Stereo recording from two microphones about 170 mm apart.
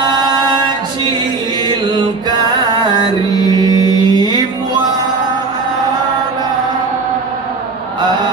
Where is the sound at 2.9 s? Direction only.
25° right (ahead or behind).